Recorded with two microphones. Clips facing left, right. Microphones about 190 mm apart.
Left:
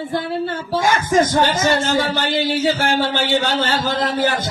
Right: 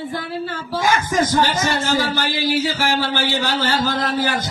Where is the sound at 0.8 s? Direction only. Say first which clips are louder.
Left 2 dB; 60° left (ahead or behind).